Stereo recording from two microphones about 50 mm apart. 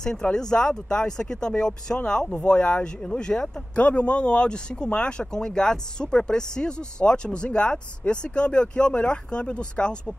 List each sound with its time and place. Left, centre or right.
0.0 s speech: centre
1.5 s speech: left